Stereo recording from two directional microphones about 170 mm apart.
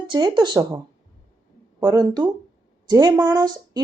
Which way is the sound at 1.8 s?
25° right (ahead or behind).